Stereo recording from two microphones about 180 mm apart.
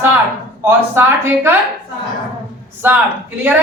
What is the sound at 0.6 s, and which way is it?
Speech, 15° right (ahead or behind).